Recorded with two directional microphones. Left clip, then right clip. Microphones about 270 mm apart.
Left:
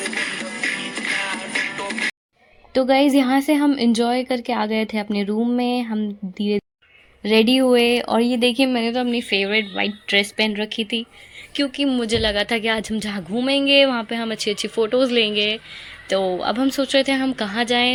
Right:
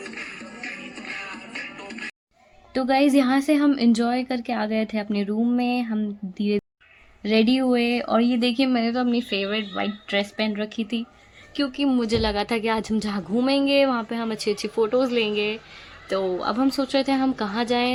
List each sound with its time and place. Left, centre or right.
0.0 s music: left
2.7 s speech: centre